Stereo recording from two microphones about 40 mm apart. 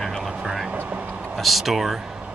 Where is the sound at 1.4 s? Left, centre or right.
Centre.